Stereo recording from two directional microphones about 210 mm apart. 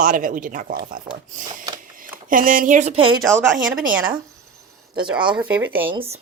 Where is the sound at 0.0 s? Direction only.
40° right (ahead or behind).